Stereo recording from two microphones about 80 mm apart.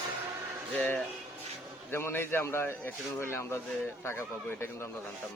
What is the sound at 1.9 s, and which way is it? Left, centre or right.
Speech, left.